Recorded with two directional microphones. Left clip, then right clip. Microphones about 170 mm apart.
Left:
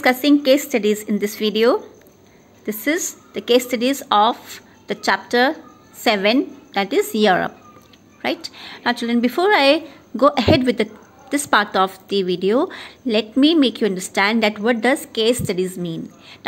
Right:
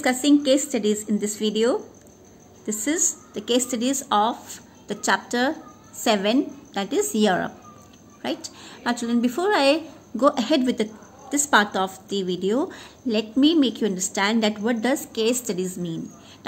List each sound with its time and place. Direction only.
0.0 s a woman's voice: 30° left (ahead or behind)